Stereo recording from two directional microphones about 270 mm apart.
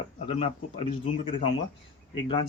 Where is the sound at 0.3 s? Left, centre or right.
Left.